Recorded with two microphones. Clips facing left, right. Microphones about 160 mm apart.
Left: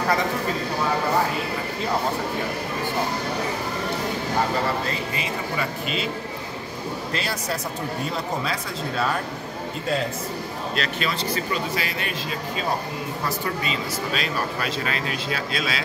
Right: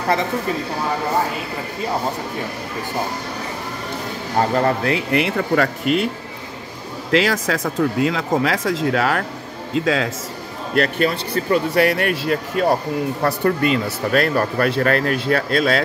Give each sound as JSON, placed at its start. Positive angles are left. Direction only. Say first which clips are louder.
{"t": 4.8, "sound": "speech", "louder": "right 9 dB", "side_deg": -70}
{"t": 7.1, "sound": "speech", "louder": "right 13 dB", "side_deg": -90}
{"t": 10.7, "sound": "speech", "louder": "right 10 dB", "side_deg": -55}
{"t": 13.2, "sound": "speech", "louder": "right 10 dB", "side_deg": -55}